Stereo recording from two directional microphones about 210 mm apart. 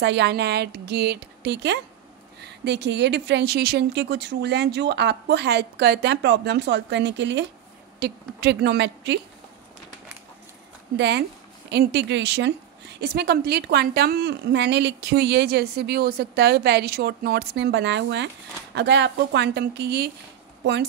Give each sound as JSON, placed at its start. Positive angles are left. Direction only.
{"t": 0.0, "sound": "a woman's voice", "side_deg": -55}
{"t": 11.0, "sound": "a woman's voice", "side_deg": -55}